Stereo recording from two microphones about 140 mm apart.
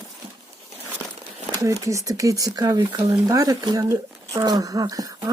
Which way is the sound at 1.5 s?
20° right (ahead or behind).